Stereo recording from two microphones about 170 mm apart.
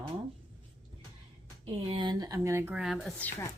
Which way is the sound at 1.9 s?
25° right (ahead or behind).